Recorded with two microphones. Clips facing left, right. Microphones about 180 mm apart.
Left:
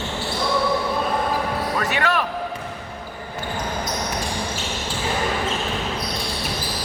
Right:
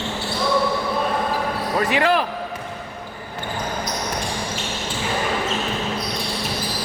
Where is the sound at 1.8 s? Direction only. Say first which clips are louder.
Right 6 dB; 30° right (ahead or behind).